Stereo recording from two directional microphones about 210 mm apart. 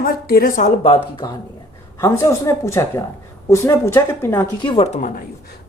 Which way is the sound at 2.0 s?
15° left (ahead or behind).